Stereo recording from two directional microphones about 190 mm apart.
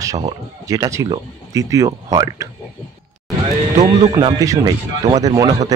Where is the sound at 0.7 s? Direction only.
15° right (ahead or behind).